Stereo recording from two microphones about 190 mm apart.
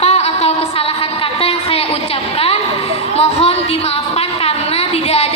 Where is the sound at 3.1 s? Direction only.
30° left (ahead or behind).